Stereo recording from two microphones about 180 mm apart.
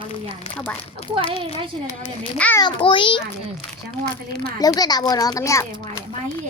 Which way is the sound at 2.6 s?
25° left (ahead or behind).